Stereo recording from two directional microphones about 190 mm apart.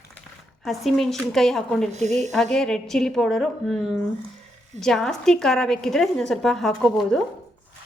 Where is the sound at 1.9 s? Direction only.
35° right (ahead or behind).